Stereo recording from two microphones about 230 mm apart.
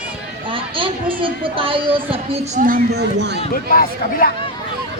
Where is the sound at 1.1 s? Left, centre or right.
Right.